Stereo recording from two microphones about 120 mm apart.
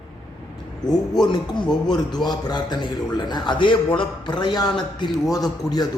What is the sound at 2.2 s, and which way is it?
A man's voice, 35° left (ahead or behind).